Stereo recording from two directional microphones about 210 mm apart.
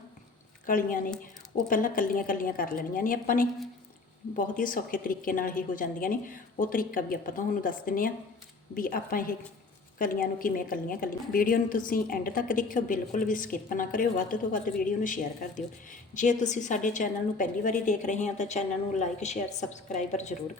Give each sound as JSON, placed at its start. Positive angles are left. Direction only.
{"t": 0.6, "sound": "a woman's voice", "side_deg": 40}